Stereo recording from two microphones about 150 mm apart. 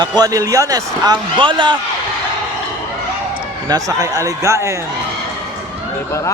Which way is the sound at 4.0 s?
20° right (ahead or behind).